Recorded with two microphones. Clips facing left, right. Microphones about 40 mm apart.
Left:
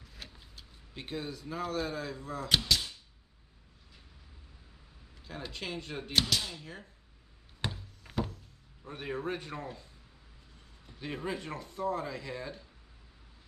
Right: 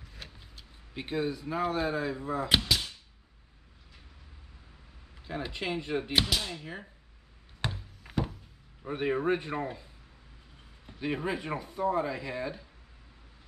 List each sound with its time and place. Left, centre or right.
0.0 s vehicle: centre
0.9 s speech: centre
5.2 s speech: centre
7.6 s a sound: centre
8.8 s speech: right
10.9 s speech: centre